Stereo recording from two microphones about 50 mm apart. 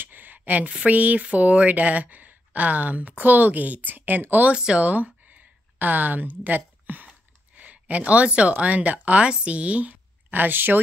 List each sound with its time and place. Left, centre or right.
0.0 s speech: right
4.5 s speech: right